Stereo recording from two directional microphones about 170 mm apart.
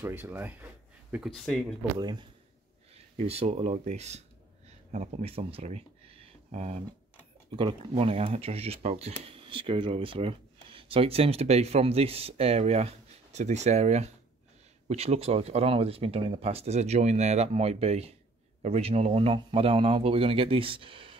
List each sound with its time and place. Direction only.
0.0 s speech: 10° right (ahead or behind)
1.1 s speech: centre (ahead or behind)
2.0 s speech: 25° right (ahead or behind)
2.9 s speech: 35° right (ahead or behind)
4.6 s a sound: 40° right (ahead or behind)
7.5 s speech: 30° right (ahead or behind)